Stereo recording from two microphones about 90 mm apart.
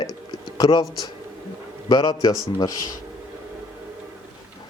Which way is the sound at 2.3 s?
45° left (ahead or behind).